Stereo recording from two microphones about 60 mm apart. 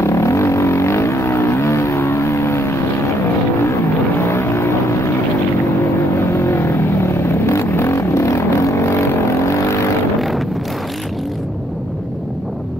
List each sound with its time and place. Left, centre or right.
0.0 s vehicle: left
4.2 s vehicle: left
6.3 s vehicle: left